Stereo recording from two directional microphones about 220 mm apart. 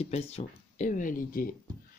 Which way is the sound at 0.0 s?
30° left (ahead or behind).